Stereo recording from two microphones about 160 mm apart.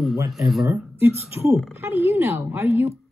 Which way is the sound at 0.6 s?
15° right (ahead or behind).